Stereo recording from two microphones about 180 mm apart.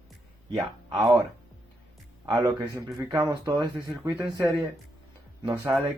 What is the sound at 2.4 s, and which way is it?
Speech, 15° right (ahead or behind).